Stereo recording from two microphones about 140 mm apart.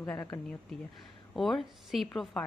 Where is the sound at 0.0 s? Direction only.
20° left (ahead or behind).